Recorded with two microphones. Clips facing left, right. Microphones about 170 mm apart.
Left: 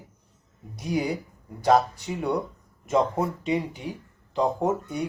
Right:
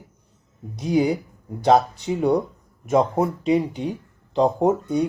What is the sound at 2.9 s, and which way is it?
Speech, 25° right (ahead or behind).